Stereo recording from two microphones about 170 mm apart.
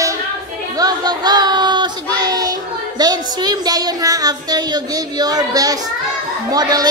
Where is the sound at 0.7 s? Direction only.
25° right (ahead or behind).